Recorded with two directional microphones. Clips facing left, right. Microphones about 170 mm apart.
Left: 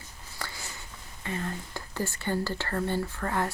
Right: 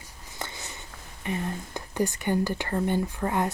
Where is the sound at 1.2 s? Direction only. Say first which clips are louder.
Right 3 dB; 20° right (ahead or behind).